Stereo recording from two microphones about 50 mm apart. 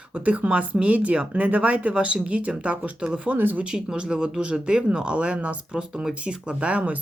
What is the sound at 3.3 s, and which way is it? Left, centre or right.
Speech, right.